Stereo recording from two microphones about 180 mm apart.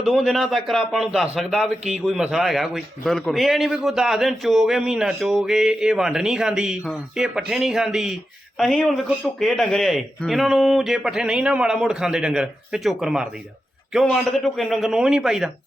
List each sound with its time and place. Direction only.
0.0 s a man's voice: centre (ahead or behind)